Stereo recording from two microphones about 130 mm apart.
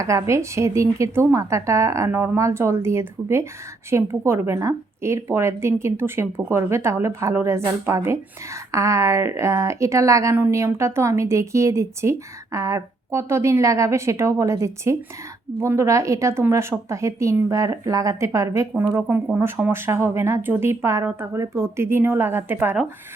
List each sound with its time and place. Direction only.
0.0 s a woman's voice: 25° right (ahead or behind)